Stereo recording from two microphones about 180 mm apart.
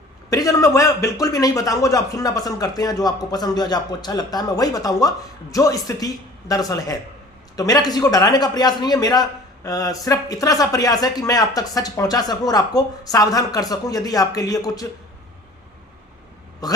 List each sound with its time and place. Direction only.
0.3 s a man's voice: 20° left (ahead or behind)
16.6 s a man's voice: 20° left (ahead or behind)